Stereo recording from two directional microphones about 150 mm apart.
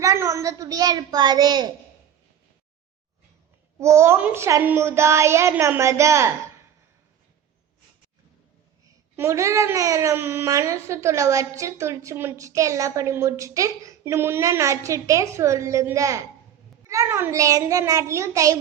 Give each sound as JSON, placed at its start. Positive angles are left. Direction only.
{"t": 0.0, "sound": "a child's voice", "side_deg": -20}
{"t": 3.8, "sound": "speech", "side_deg": -20}
{"t": 9.1, "sound": "speech", "side_deg": -20}